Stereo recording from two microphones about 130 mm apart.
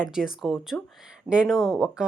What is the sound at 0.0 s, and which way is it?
Speech, 5° right (ahead or behind).